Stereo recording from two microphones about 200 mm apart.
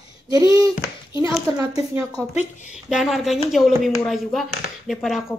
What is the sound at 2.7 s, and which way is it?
Speech, centre (ahead or behind).